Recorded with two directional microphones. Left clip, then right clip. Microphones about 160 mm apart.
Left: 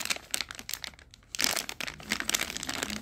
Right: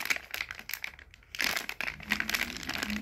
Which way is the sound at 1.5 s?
25° left (ahead or behind).